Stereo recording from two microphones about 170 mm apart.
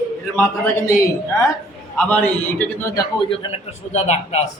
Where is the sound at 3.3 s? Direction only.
40° left (ahead or behind).